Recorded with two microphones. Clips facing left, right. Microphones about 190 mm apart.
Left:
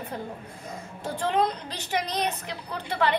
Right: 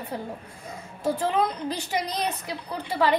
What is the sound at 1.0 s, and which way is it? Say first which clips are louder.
A woman's voice: right 1 dB; 10° right (ahead or behind).